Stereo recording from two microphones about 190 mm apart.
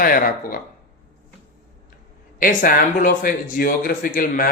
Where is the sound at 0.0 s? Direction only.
50° left (ahead or behind).